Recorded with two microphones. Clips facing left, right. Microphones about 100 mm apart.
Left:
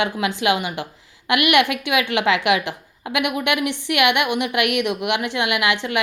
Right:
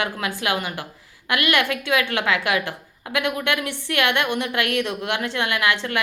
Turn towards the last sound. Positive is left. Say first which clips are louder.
# left 2 dB
turn(degrees=20)  # may be behind; listen again after turning